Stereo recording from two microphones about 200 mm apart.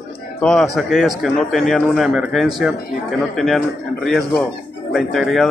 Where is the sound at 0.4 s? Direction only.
5° left (ahead or behind).